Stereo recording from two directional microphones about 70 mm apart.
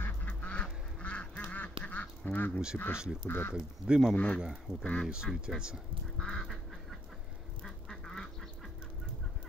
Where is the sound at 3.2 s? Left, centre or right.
Left.